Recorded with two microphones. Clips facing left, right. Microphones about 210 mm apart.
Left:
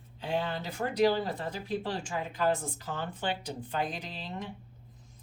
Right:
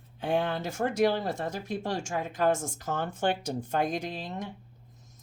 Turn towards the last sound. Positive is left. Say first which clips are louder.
# right 5 dB
turn(degrees=-45)  # may be behind; listen again after turning